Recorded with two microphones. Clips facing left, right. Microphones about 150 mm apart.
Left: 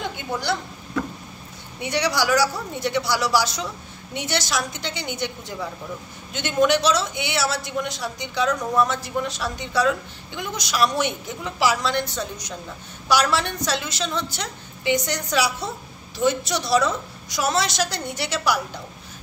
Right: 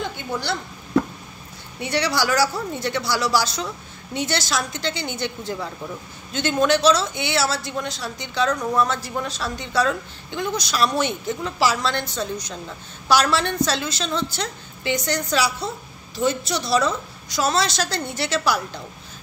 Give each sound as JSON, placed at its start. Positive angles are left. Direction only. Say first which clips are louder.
{"t": 1.8, "sound": "a woman's voice", "louder": "even", "side_deg": 15}